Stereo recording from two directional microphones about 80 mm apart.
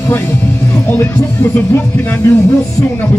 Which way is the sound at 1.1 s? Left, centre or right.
Left.